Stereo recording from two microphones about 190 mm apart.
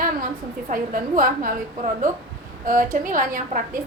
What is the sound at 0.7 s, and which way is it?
A woman's voice, 45° right (ahead or behind).